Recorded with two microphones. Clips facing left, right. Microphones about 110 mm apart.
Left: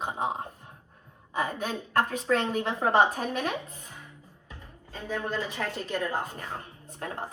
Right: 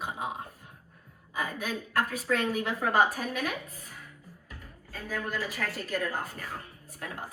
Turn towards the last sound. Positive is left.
turn(degrees=25)  # may be behind; listen again after turning